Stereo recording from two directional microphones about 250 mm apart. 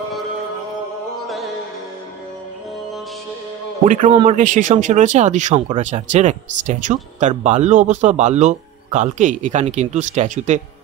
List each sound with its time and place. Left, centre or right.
3.8 s speech: right